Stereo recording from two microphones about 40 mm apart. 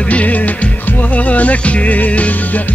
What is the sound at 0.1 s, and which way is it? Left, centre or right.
Music, left.